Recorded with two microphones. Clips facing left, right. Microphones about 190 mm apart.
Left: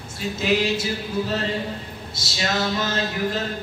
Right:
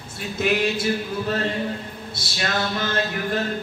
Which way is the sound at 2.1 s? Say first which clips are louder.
Left 1 dB; 55° right (ahead or behind).